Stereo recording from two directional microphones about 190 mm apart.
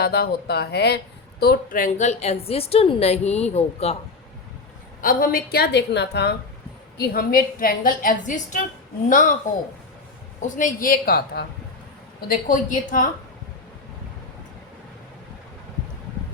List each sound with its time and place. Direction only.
0.0 s speech: 55° left (ahead or behind); by 3.9 s 35° left (ahead or behind)
4.9 s a woman's voice: 50° left (ahead or behind)
10.4 s a woman's voice: 40° left (ahead or behind)